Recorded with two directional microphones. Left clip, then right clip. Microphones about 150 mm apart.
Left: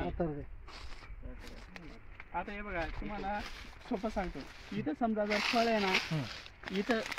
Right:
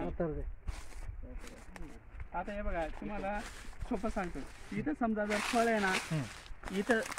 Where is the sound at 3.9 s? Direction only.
Centre (ahead or behind).